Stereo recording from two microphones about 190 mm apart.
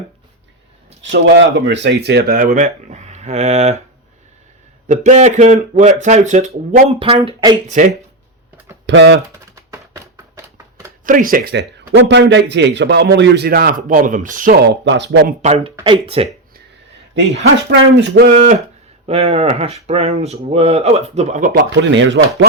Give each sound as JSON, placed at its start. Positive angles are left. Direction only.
{"t": 1.1, "sound": "a man's voice", "side_deg": -70}
{"t": 2.5, "sound": "speech", "side_deg": -40}
{"t": 4.9, "sound": "speech", "side_deg": -40}
{"t": 7.3, "sound": "speech", "side_deg": -25}
{"t": 7.7, "sound": "speech", "side_deg": -40}
{"t": 8.9, "sound": "a man's voice", "side_deg": -65}
{"t": 9.6, "sound": "a sound", "side_deg": -15}
{"t": 11.0, "sound": "speech", "side_deg": -45}
{"t": 11.9, "sound": "a man's voice", "side_deg": -70}
{"t": 15.3, "sound": "speech", "side_deg": -35}
{"t": 18.1, "sound": "speech", "side_deg": -55}
{"t": 19.0, "sound": "speech", "side_deg": -30}
{"t": 21.5, "sound": "speech", "side_deg": -70}